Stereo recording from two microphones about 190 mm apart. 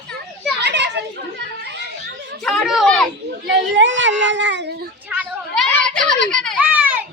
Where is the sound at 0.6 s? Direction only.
65° right (ahead or behind).